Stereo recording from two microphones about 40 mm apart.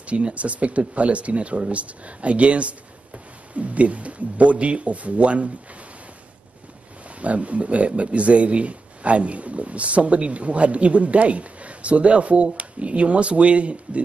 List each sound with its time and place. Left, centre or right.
0.0 s speech: right
7.2 s speech: right